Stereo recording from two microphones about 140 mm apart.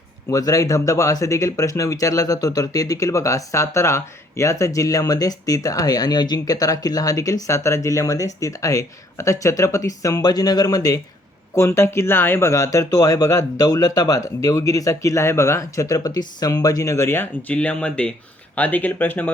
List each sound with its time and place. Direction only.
0.3 s speech: 25° left (ahead or behind)